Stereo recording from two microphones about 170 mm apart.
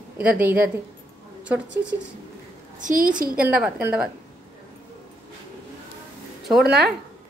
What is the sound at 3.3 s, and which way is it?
Speech, 5° right (ahead or behind).